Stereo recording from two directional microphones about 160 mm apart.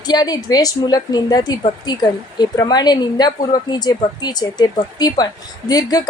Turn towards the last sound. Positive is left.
turn(degrees=25)  # may be behind; listen again after turning